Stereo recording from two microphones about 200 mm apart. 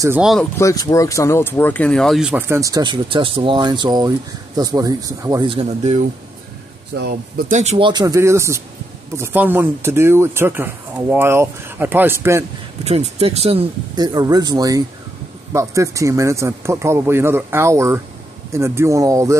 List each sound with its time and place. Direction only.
0.2 s speech: centre (ahead or behind)
0.6 s speech: 15° left (ahead or behind); by 6.0 s 30° right (ahead or behind)
7.0 s speech: 50° right (ahead or behind)
7.5 s speech: 35° right (ahead or behind); by 12.4 s 15° right (ahead or behind)
12.8 s speech: 30° right (ahead or behind); by 19.3 s 15° right (ahead or behind)